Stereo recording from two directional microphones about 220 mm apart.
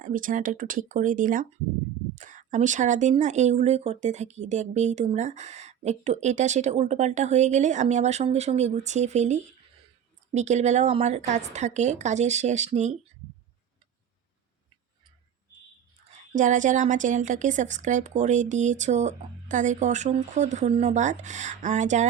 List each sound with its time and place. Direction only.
0.0 s speech: 35° right (ahead or behind)
16.3 s speech: 35° right (ahead or behind)